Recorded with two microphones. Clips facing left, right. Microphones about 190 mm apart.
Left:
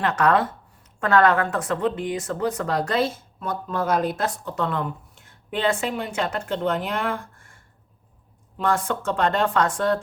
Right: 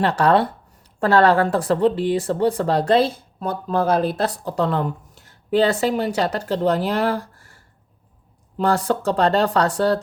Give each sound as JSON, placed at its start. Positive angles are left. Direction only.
{"t": 0.0, "sound": "speech", "side_deg": -30}